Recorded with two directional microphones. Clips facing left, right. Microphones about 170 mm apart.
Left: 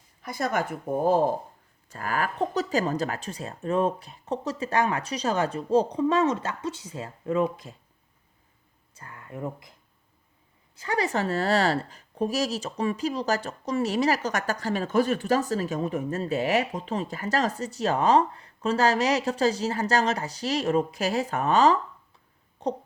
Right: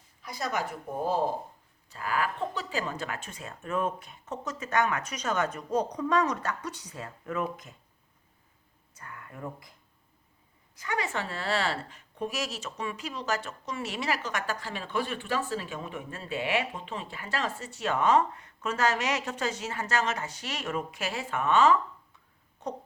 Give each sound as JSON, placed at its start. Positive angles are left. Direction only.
{"t": 0.2, "sound": "a woman's voice", "side_deg": 50}
{"t": 9.0, "sound": "speech", "side_deg": 25}
{"t": 10.8, "sound": "a woman's voice", "side_deg": 35}